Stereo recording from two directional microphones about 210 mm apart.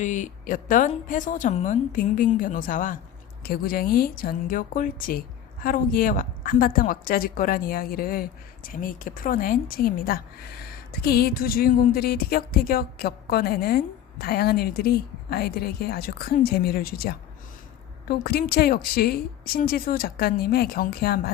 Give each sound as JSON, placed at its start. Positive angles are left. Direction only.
{"t": 0.0, "sound": "a woman's voice", "side_deg": 35}